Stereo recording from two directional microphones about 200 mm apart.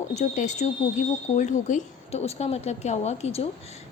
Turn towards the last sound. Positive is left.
turn(degrees=30)  # may be behind; listen again after turning